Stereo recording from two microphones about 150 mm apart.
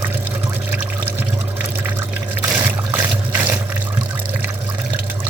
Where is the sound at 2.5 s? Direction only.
15° right (ahead or behind).